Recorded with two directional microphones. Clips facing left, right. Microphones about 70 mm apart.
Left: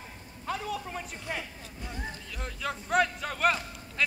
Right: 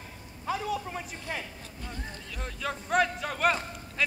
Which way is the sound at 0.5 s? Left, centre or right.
Centre.